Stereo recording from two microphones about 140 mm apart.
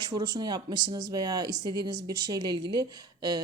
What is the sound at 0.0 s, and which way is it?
Speech, 30° right (ahead or behind).